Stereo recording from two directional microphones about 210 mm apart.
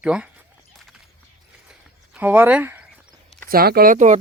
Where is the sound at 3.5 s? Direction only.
45° right (ahead or behind).